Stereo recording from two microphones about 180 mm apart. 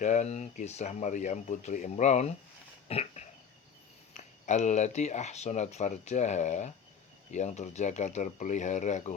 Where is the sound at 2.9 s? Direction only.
35° left (ahead or behind).